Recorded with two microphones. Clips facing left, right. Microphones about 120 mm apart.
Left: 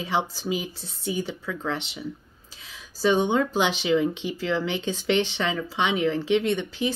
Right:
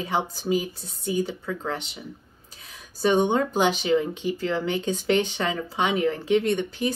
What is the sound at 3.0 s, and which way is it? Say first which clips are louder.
A woman's voice: right 1 dB; 50° right (ahead or behind).